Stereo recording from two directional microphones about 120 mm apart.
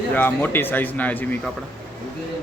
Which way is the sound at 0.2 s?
15° left (ahead or behind).